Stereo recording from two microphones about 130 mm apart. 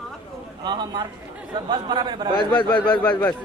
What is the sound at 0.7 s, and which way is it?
Speech, 35° right (ahead or behind).